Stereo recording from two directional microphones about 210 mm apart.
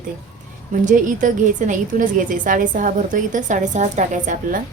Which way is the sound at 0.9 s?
40° right (ahead or behind).